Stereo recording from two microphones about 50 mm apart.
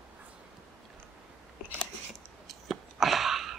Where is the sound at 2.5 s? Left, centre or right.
Centre.